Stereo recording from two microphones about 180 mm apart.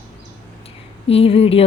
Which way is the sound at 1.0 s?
35° left (ahead or behind).